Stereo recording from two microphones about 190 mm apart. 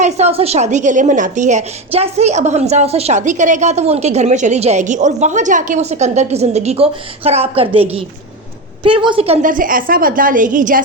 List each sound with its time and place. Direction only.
0.0 s a woman's voice: 35° right (ahead or behind)
9.4 s a woman's voice: 45° right (ahead or behind)